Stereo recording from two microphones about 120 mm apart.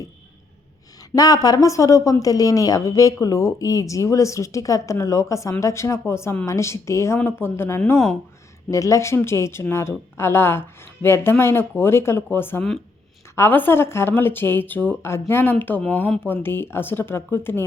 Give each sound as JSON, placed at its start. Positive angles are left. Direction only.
{"t": 1.1, "sound": "a woman's voice", "side_deg": 30}